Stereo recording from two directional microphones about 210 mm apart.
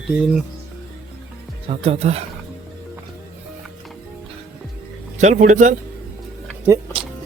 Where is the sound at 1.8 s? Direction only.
30° right (ahead or behind).